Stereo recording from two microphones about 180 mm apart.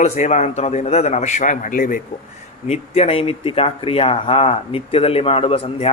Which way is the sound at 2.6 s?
35° left (ahead or behind).